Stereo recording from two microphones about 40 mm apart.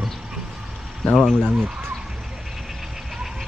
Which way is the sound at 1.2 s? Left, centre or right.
Left.